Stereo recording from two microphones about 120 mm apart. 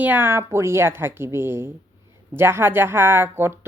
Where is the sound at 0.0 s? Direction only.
15° right (ahead or behind).